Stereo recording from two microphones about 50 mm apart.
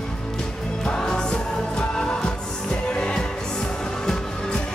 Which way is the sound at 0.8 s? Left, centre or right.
Centre.